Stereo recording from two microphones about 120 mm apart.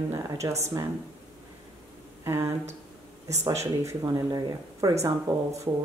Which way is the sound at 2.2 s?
25° right (ahead or behind).